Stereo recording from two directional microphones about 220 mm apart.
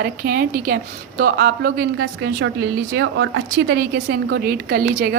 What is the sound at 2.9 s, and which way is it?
A woman's voice, 60° right (ahead or behind).